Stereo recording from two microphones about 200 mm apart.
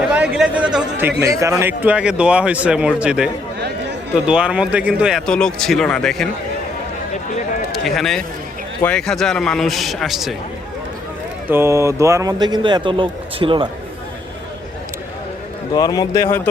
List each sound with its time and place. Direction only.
0.1 s speech: 5° right (ahead or behind)
4.3 s speech: 5° right (ahead or behind)
7.9 s speech: centre (ahead or behind)
11.4 s a man's voice: 10° right (ahead or behind)
15.7 s a man's voice: 20° left (ahead or behind)